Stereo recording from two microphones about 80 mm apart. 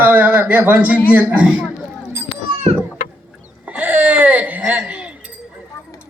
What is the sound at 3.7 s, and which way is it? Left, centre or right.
Baby cry, centre.